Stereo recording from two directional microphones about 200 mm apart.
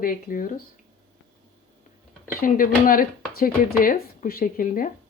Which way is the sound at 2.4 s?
45° left (ahead or behind).